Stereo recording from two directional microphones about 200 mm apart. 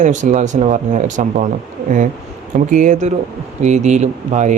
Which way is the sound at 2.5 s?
40° right (ahead or behind).